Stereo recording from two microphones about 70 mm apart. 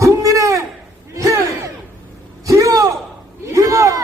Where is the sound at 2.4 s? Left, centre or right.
Right.